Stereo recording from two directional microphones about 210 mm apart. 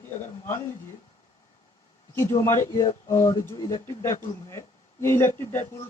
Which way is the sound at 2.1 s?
15° left (ahead or behind).